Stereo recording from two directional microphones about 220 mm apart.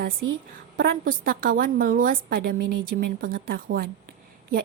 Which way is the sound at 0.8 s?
40° right (ahead or behind).